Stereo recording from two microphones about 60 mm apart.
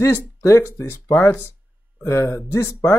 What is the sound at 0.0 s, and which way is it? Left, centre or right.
Speech, left.